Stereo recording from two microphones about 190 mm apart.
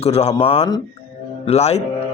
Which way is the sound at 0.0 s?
35° left (ahead or behind).